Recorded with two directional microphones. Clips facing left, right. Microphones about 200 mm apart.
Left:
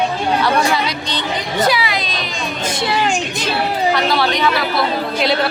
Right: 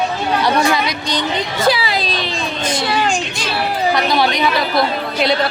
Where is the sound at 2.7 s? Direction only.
20° left (ahead or behind).